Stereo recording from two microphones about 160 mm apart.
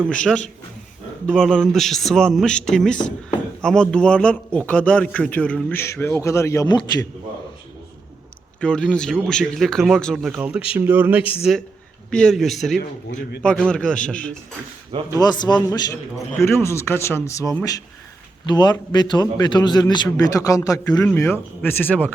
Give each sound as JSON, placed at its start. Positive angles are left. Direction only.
{"t": 1.3, "sound": "speech", "side_deg": 5}
{"t": 8.6, "sound": "speech", "side_deg": 5}
{"t": 10.3, "sound": "speech", "side_deg": -10}
{"t": 12.1, "sound": "speech", "side_deg": 5}
{"t": 15.1, "sound": "a man's voice", "side_deg": 25}